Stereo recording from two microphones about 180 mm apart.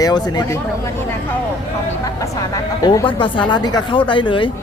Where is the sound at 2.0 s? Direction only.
20° left (ahead or behind).